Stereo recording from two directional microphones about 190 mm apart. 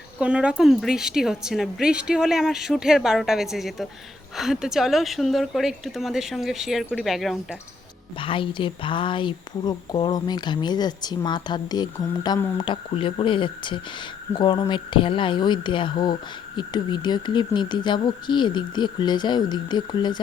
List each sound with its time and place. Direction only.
0.2 s a woman's voice: 5° right (ahead or behind)
8.2 s a woman's voice: 25° left (ahead or behind)